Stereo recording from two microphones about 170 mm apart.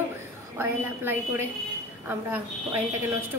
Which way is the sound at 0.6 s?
15° right (ahead or behind).